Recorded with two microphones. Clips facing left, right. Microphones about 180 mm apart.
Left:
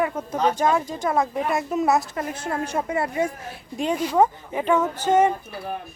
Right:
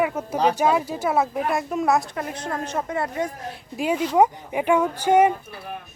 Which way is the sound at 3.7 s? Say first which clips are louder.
Right 1 dB; 5° right (ahead or behind).